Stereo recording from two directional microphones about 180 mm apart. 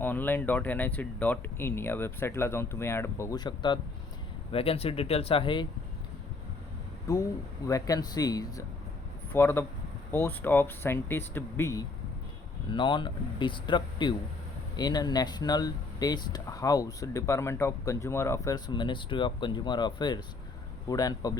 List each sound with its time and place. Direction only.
0.0 s speech: 10° left (ahead or behind); by 5.6 s 30° left (ahead or behind)
7.7 s speech: 20° left (ahead or behind)
12.7 s speech: 25° left (ahead or behind)